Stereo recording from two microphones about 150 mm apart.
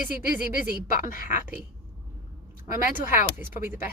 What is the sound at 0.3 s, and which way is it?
Speech, 65° left (ahead or behind).